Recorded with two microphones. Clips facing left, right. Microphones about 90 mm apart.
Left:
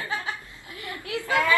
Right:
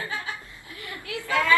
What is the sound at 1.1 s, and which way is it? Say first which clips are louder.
Chatter: left 1 dB; 20° left (ahead or behind).